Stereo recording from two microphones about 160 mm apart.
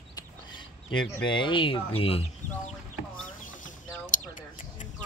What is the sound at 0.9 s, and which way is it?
Speech, 30° left (ahead or behind).